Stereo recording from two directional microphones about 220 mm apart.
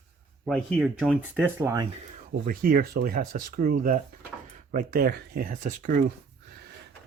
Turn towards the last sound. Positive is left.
turn(degrees=-35)  # may be behind; listen again after turning